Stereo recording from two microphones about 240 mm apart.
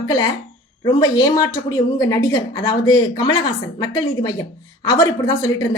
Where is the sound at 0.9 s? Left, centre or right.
Centre.